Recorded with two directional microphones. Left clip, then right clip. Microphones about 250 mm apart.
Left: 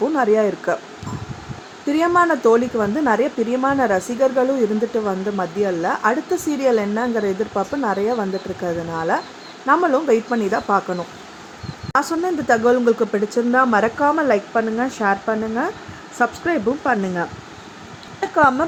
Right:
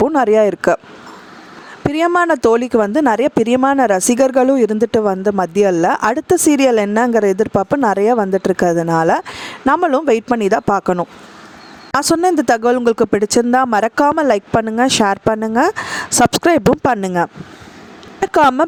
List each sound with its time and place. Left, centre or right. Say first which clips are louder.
0.1 s speech: right 5 dB; right
1.9 s speech: right 2 dB; right
18.3 s speech: right 4 dB; right